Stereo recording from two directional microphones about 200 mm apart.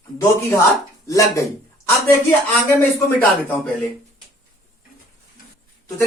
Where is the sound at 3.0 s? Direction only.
10° left (ahead or behind).